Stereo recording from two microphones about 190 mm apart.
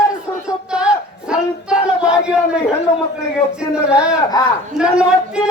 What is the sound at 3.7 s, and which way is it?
A man's voice, 5° right (ahead or behind).